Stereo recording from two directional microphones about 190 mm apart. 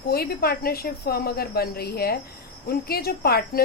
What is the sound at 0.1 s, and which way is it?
A woman's voice, 55° left (ahead or behind).